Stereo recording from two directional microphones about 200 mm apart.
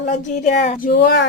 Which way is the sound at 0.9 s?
50° left (ahead or behind).